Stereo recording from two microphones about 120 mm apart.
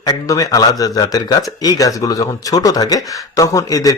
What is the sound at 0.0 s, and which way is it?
Speech, 35° left (ahead or behind).